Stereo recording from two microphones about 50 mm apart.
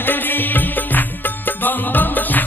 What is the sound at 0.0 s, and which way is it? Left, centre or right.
Music, left.